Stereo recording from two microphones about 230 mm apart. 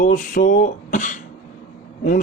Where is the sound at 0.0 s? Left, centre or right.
Left.